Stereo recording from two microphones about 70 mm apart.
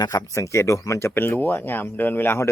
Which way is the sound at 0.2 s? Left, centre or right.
Left.